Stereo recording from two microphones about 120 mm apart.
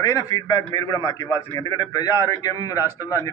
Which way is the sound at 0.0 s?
30° left (ahead or behind).